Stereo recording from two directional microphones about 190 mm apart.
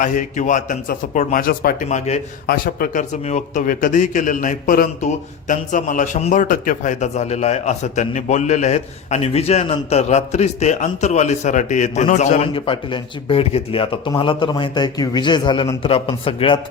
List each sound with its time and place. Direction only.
0.0 s speech: 40° left (ahead or behind)
2.5 s speech: 50° left (ahead or behind)
12.5 s speech: 25° left (ahead or behind)